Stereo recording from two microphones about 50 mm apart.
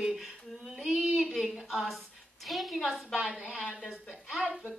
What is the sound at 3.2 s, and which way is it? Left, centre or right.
Speech, right.